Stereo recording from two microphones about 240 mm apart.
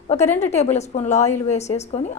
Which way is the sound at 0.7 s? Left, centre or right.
Left.